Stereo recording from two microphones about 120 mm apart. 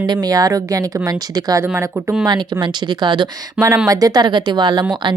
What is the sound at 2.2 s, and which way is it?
Speech, 35° right (ahead or behind).